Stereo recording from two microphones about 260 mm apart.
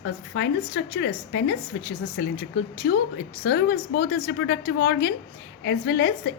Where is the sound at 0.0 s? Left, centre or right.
Left.